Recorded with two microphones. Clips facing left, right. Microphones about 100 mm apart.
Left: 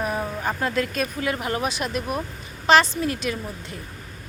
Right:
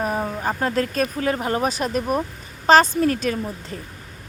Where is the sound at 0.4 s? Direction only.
40° right (ahead or behind).